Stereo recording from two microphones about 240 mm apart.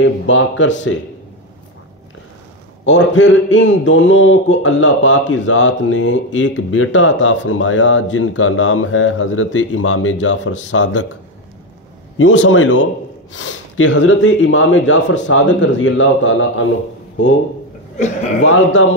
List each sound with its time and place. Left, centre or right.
0.0 s a man's voice: left
2.8 s a man's voice: left
12.2 s a man's voice: left
17.9 s speech: left